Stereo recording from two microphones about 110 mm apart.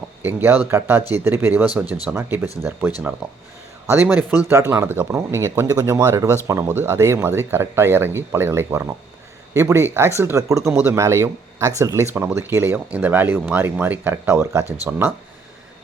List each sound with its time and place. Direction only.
0.2 s speech: 20° right (ahead or behind)
4.4 s speech: 25° right (ahead or behind)